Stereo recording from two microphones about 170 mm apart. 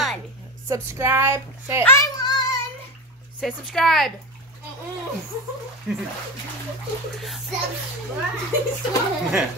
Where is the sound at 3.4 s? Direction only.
Centre (ahead or behind).